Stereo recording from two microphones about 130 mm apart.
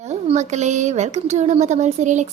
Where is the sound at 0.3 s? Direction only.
60° right (ahead or behind).